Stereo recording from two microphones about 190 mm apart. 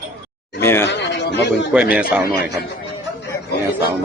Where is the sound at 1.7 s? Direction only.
5° right (ahead or behind).